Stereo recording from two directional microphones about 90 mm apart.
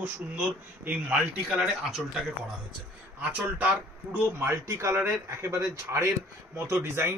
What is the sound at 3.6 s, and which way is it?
Speech, 15° right (ahead or behind).